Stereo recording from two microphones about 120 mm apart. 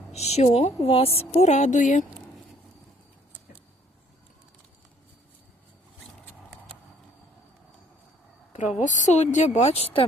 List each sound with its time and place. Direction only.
0.1 s a woman's voice: 60° left (ahead or behind); by 2.0 s 90° left
8.5 s speech: 90° left; by 10.1 s 55° left (ahead or behind)